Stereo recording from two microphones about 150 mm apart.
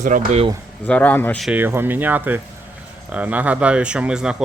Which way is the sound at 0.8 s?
10° left (ahead or behind).